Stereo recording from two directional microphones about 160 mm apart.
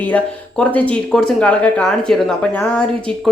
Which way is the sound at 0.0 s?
10° left (ahead or behind).